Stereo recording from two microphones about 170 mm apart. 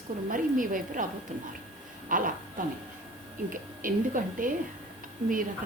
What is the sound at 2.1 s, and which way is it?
A woman's voice, 55° right (ahead or behind).